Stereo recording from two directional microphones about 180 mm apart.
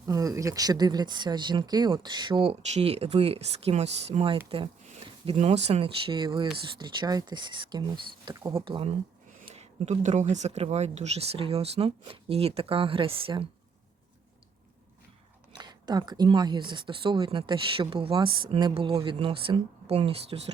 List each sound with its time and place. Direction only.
0.1 s speech: 20° right (ahead or behind)
15.5 s speech: 25° right (ahead or behind)